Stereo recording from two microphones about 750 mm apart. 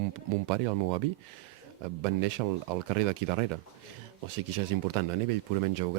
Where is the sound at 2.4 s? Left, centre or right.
Right.